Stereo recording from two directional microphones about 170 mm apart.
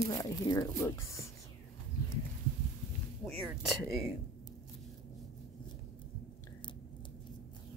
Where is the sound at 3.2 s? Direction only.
Centre (ahead or behind).